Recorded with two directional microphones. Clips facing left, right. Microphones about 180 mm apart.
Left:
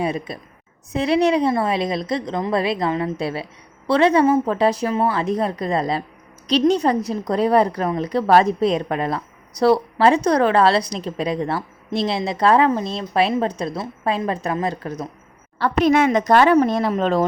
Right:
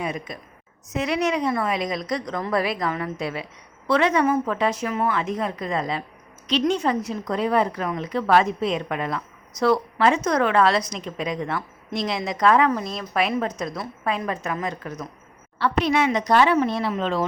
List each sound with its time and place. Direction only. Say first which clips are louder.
0.0 s a woman's voice: left 5 dB; 30° left (ahead or behind)
15.5 s a woman's voice: left 5 dB; 45° left (ahead or behind)